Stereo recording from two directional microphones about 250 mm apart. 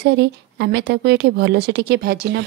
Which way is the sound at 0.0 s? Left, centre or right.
Right.